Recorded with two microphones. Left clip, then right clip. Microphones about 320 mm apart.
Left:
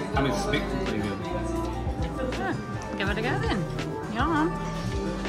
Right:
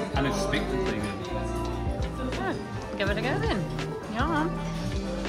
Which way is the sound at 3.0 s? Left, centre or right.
Centre.